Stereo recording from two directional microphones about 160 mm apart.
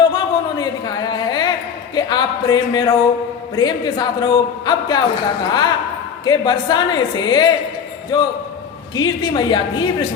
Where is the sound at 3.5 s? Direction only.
25° left (ahead or behind).